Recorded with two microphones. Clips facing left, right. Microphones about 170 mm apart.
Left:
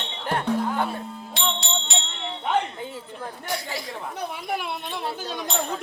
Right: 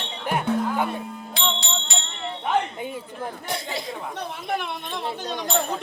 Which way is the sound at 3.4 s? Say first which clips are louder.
Left 2 dB; 20° right (ahead or behind).